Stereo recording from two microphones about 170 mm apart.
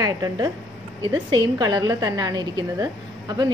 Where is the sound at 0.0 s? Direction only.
20° right (ahead or behind).